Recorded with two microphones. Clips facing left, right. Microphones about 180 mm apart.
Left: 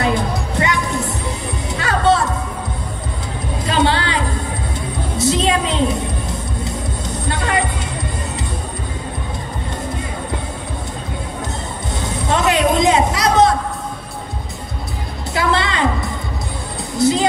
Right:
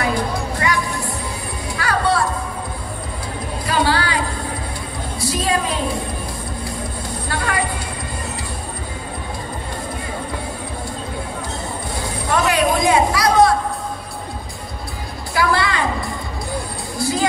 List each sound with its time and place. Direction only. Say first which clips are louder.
0.0 s music: left 2 dB; 20° left (ahead or behind)
3.6 s a sound: left 2 dB; 20° left (ahead or behind)
5.1 s music: left 4 dB; 25° left (ahead or behind)
7.2 s a sound: left 3 dB; 20° left (ahead or behind)
12.0 s music: left 1 dB; 20° left (ahead or behind)
15.3 s music: even; 20° left (ahead or behind)
17.0 s music: left 5 dB; 20° left (ahead or behind)